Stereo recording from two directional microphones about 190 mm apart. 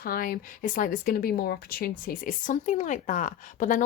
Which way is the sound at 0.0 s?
50° left (ahead or behind).